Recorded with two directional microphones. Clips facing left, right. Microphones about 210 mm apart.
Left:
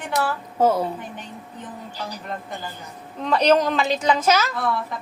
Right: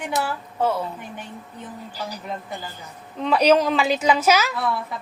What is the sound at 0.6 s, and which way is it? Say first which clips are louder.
Speech: left 4 dB; 40° left (ahead or behind).